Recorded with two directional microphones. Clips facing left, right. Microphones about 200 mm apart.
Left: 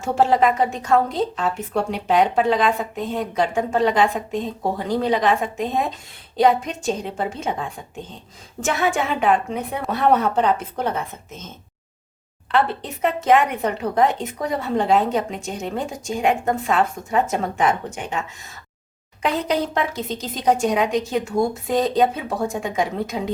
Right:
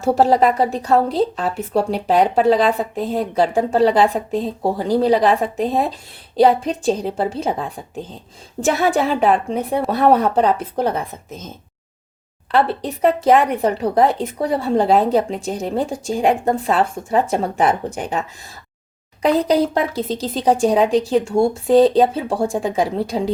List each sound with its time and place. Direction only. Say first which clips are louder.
0.0 s a woman's voice: right 3 dB; 35° right (ahead or behind)